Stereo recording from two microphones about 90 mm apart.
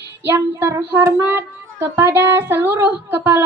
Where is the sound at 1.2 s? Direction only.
25° right (ahead or behind).